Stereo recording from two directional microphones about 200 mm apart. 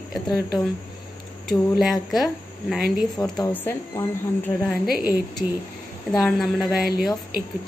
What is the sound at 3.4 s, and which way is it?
Speech, 10° left (ahead or behind).